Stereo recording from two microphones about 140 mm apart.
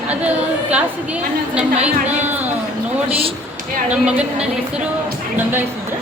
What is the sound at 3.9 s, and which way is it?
Speech, 10° right (ahead or behind).